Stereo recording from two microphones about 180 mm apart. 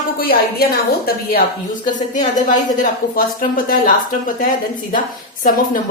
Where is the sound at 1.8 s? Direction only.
45° left (ahead or behind).